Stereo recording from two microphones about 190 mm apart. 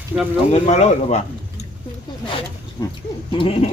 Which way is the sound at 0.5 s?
35° left (ahead or behind).